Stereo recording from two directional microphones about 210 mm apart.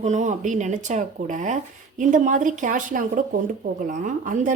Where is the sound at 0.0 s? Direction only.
35° right (ahead or behind).